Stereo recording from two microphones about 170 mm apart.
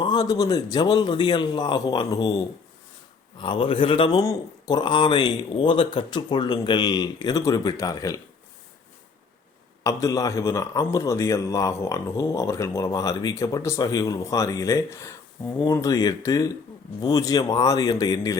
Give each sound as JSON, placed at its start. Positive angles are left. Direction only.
{"t": 0.0, "sound": "a man's voice", "side_deg": 25}
{"t": 9.8, "sound": "a man's voice", "side_deg": 20}